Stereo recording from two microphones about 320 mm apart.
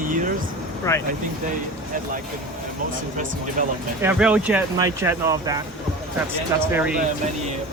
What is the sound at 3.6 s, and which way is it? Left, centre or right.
Speech, right.